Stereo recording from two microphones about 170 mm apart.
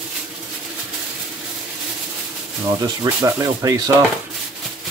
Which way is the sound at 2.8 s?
20° right (ahead or behind).